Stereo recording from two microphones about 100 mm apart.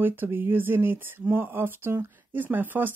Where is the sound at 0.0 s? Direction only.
20° right (ahead or behind).